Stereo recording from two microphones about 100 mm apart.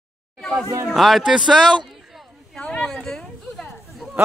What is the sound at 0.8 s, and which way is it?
Speech, centre (ahead or behind).